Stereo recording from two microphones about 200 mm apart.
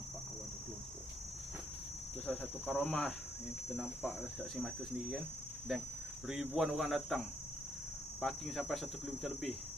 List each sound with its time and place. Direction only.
2.2 s speech: centre (ahead or behind)